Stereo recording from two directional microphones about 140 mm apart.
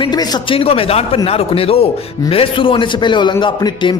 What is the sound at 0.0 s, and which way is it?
A man's voice, 30° left (ahead or behind).